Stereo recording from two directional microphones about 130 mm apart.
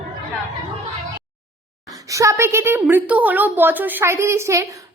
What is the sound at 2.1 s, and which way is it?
A woman's voice, 25° right (ahead or behind).